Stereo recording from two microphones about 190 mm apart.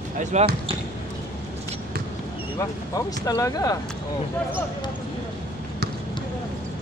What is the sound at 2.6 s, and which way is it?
Speech, 15° left (ahead or behind).